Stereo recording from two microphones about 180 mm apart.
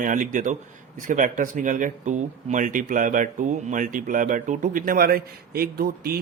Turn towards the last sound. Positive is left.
turn(degrees=-55)  # may be behind; listen again after turning